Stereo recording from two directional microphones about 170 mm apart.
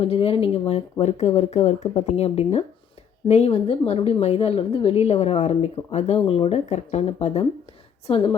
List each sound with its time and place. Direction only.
0.0 s a woman's voice: 35° left (ahead or behind)